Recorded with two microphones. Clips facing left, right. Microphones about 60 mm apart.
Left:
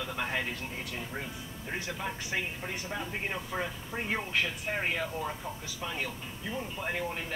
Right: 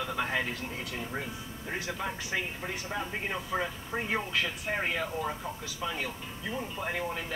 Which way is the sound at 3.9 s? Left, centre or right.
Right.